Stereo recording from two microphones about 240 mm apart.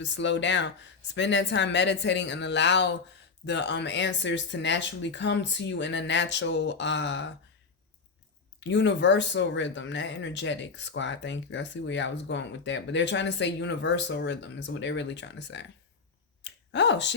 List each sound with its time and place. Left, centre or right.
0.0 s speech: left
8.6 s speech: left
16.4 s a sound: left